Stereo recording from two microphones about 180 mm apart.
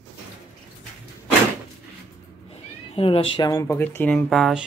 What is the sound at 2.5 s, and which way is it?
Speech, 30° left (ahead or behind).